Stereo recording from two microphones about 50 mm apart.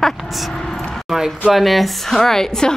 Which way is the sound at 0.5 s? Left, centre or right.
Centre.